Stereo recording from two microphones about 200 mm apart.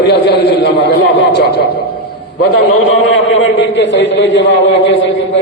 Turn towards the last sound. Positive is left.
turn(degrees=65)  # may be behind; listen again after turning